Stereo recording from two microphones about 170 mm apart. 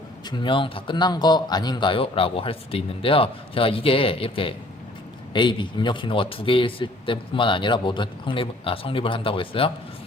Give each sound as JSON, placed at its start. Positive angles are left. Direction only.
{"t": 0.3, "sound": "a man's voice", "side_deg": 30}